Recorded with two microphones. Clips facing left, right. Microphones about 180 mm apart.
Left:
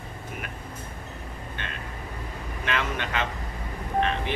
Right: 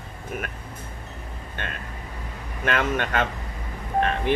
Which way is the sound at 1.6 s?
50° right (ahead or behind).